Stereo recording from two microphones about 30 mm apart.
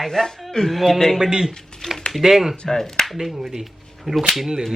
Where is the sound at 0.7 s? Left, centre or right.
Centre.